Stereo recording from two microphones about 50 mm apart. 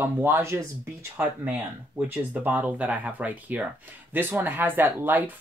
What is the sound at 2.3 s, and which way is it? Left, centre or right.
Speech, right.